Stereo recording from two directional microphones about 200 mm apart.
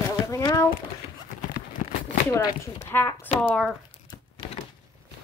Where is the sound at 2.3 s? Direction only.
20° left (ahead or behind).